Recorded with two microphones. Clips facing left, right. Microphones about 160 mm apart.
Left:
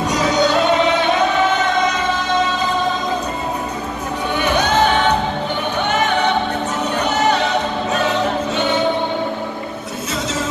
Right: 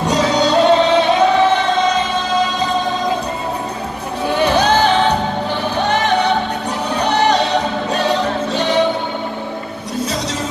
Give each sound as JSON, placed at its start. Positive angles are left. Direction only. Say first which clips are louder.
{"t": 0.0, "sound": "music", "louder": "right 1 dB", "side_deg": -30}
{"t": 4.4, "sound": "music", "louder": "right 3 dB", "side_deg": -35}
{"t": 7.0, "sound": "music", "louder": "right 3 dB", "side_deg": -35}